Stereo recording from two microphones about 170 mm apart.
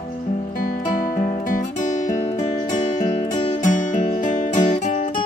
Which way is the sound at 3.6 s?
50° left (ahead or behind).